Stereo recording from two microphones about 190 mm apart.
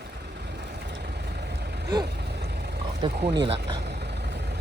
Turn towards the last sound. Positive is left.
turn(degrees=-25)  # may be behind; listen again after turning